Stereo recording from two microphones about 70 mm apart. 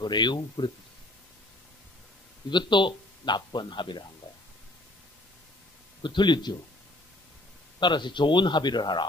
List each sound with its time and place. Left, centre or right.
0.0 s speech: left
2.5 s speech: left
6.1 s speech: left
7.8 s speech: left